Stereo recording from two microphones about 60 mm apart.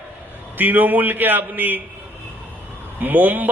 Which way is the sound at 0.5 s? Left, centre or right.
Right.